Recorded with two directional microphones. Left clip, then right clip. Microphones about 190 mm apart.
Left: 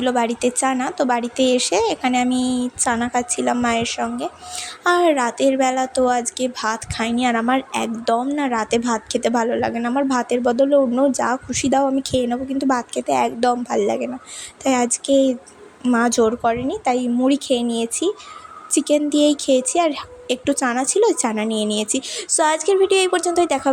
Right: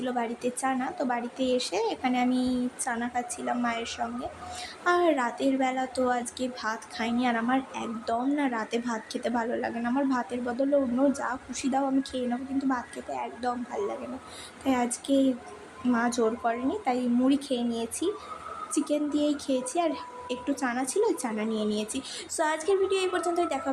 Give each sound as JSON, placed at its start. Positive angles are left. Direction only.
{"t": 0.0, "sound": "a woman's voice", "side_deg": 40}